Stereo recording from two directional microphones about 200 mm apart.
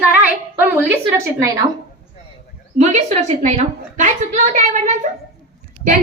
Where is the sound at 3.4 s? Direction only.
35° right (ahead or behind).